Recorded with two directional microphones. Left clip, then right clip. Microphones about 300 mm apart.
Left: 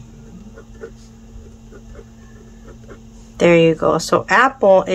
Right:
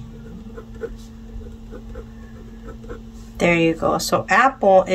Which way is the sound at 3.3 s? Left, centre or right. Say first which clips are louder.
Left 5 dB; centre.